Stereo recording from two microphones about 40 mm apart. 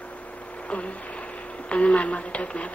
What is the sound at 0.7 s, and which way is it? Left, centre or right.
Speech, left.